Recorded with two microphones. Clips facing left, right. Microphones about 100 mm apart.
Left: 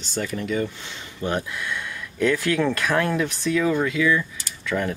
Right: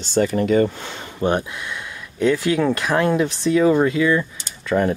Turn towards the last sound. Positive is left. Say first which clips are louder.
# right 6 dB
turn(degrees=-30)  # may be behind; listen again after turning